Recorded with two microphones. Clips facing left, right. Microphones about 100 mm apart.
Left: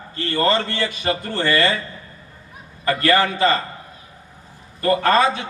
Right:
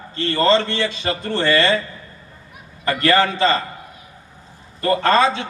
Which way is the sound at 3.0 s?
25° right (ahead or behind).